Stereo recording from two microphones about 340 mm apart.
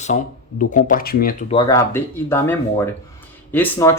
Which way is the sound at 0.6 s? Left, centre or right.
Left.